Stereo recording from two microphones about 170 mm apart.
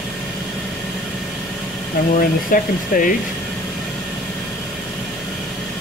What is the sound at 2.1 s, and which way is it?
Speech, 55° left (ahead or behind).